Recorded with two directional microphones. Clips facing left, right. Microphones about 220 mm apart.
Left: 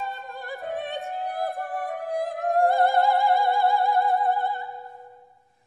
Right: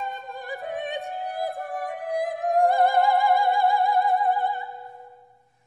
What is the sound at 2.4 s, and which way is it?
Opera, 15° right (ahead or behind).